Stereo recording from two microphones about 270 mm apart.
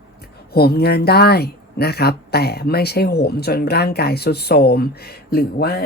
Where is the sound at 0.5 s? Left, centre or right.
Left.